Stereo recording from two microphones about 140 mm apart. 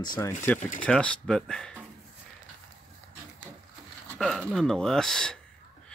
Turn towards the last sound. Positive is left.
turn(degrees=5)  # may be behind; listen again after turning